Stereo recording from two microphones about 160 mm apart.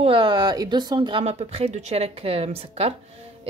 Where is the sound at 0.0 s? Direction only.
30° right (ahead or behind).